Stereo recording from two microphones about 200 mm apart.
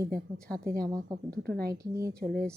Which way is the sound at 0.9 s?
20° right (ahead or behind).